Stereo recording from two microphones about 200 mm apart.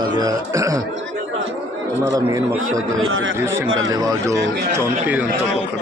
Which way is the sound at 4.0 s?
15° right (ahead or behind).